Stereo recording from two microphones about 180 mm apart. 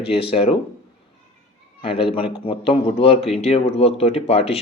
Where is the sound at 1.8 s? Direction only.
30° left (ahead or behind).